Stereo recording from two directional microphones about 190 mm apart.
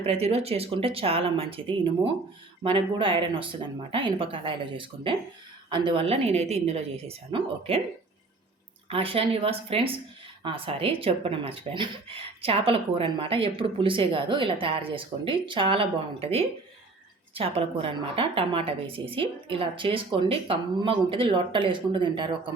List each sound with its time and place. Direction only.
0.0 s speech: 35° right (ahead or behind)
8.9 s speech: 30° right (ahead or behind)